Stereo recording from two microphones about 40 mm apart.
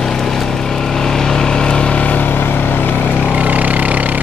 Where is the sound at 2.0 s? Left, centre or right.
Left.